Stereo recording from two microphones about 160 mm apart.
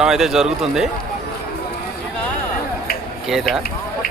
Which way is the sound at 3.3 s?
Centre (ahead or behind).